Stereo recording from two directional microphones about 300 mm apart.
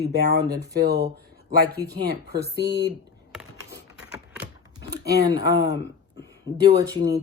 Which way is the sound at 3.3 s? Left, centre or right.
Centre.